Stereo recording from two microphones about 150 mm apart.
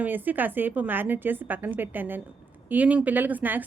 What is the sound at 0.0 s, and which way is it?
A woman's voice, 10° right (ahead or behind).